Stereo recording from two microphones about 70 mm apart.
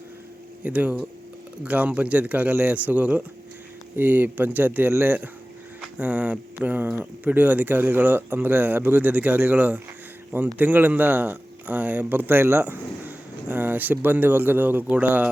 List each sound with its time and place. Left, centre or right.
0.6 s speech: centre